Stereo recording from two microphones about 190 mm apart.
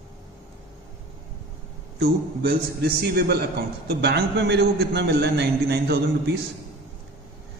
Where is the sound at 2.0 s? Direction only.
55° right (ahead or behind).